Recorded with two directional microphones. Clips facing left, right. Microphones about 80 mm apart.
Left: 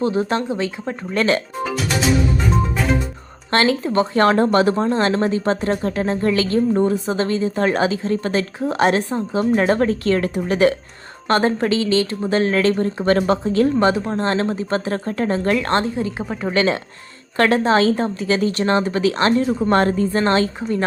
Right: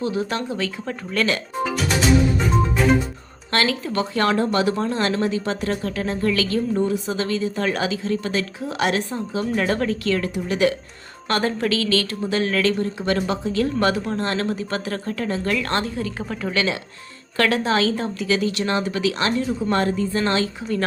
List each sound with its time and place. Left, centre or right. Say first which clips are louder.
0.0 s speech: left 5 dB; left
2.4 s music: even; centre
3.5 s speech: left 5 dB; left
13.7 s a woman's voice: left 4 dB; left
17.3 s speech: left 4 dB; left